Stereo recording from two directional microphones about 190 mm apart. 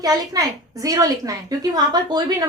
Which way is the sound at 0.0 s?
20° right (ahead or behind).